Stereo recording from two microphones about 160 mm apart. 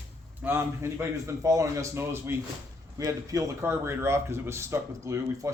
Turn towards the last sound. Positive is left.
turn(degrees=-20)  # may be behind; listen again after turning